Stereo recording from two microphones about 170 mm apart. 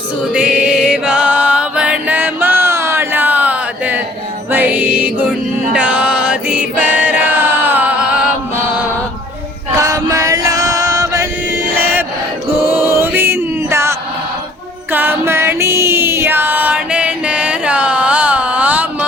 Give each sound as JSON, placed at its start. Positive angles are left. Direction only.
{"t": 0.3, "sound": "music", "side_deg": -5}
{"t": 5.7, "sound": "chant", "side_deg": -5}
{"t": 9.8, "sound": "chant", "side_deg": -20}
{"t": 12.5, "sound": "music", "side_deg": -15}
{"t": 14.9, "sound": "music", "side_deg": -10}